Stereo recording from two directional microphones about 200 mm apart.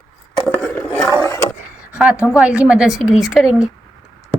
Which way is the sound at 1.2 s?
15° left (ahead or behind).